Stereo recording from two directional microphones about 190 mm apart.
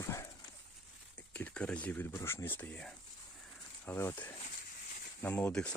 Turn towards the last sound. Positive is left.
turn(degrees=5)  # may be behind; listen again after turning